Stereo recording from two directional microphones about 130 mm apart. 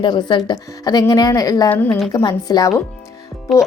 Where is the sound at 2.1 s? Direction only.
30° left (ahead or behind).